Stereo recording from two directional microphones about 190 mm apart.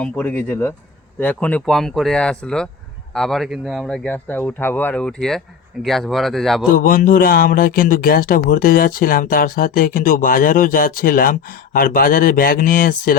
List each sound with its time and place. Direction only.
0.0 s speech: 10° left (ahead or behind)
6.7 s speech: 50° left (ahead or behind)